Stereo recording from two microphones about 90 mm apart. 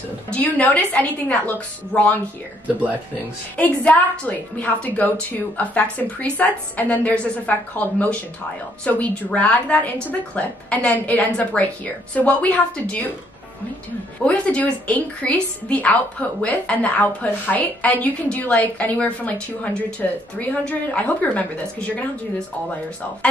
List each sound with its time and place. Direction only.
0.3 s a woman's voice: 15° left (ahead or behind)
3.5 s a woman's voice: 15° left (ahead or behind)
14.2 s a woman's voice: 15° left (ahead or behind)